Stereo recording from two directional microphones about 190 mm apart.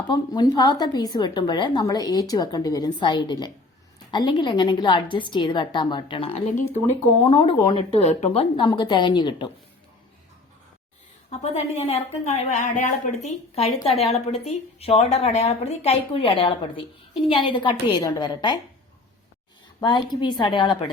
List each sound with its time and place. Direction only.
0.1 s a woman's voice: 20° left (ahead or behind)
11.3 s a woman's voice: 35° left (ahead or behind)
20.2 s a woman's voice: 25° left (ahead or behind)